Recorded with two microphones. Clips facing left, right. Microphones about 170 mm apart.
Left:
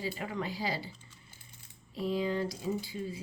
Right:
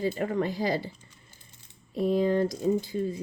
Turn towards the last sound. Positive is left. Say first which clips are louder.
# right 9 dB
turn(degrees=-45)  # may be behind; listen again after turning